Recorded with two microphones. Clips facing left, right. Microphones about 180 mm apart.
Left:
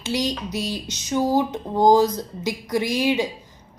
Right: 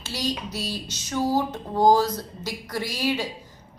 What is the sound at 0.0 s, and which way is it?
Speech, 15° left (ahead or behind).